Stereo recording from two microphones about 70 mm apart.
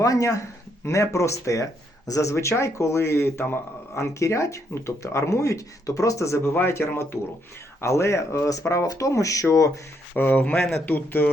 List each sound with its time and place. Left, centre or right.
0.0 s speech: left
2.3 s speech: left
10.2 s speech: left